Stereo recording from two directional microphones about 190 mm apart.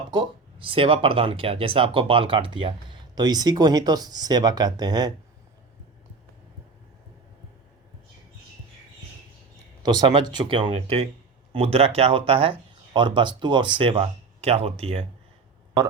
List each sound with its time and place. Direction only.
0.1 s speech: 25° right (ahead or behind)
9.8 s speech: 25° right (ahead or behind)